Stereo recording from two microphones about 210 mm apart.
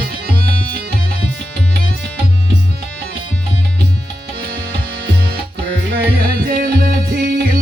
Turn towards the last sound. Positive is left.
turn(degrees=-50)  # may be behind; listen again after turning